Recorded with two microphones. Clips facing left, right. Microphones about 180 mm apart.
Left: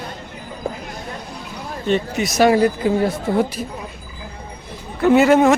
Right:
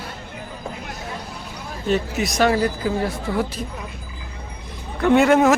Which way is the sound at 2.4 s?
20° left (ahead or behind).